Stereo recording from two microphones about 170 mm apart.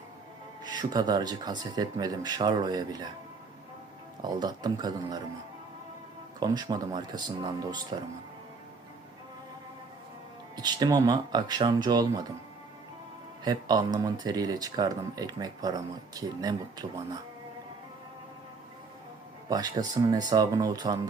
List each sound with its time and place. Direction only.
0.6 s speech: 25° right (ahead or behind)
4.2 s speech: 25° right (ahead or behind)
6.4 s speech: 25° right (ahead or behind)
10.6 s speech: 25° right (ahead or behind)
13.4 s speech: 25° right (ahead or behind)
19.5 s speech: 20° right (ahead or behind)